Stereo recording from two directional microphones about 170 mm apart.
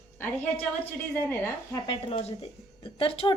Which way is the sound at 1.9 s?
30° left (ahead or behind).